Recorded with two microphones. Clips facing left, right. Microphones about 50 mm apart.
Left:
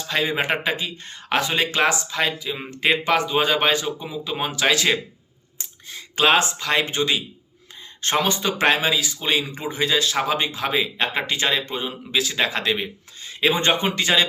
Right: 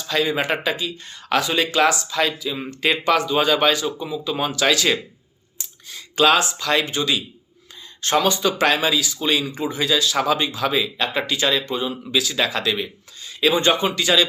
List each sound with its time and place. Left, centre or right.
0.1 s speech: left